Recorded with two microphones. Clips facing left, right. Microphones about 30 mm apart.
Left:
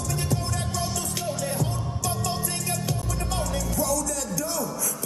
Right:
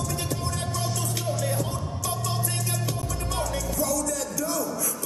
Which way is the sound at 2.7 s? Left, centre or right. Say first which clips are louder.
Left 1 dB; right.